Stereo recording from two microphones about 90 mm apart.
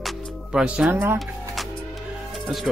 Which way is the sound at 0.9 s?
25° right (ahead or behind).